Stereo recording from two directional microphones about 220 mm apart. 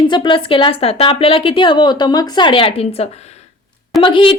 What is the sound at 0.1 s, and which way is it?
A woman's voice, 20° left (ahead or behind).